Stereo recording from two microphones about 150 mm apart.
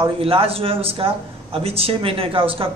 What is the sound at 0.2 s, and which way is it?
A man's voice, 40° right (ahead or behind).